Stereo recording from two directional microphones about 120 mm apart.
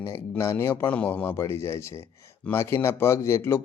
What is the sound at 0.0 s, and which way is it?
Speech, 20° left (ahead or behind).